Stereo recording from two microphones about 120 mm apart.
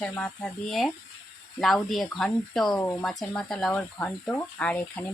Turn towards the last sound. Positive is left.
turn(degrees=10)  # may be behind; listen again after turning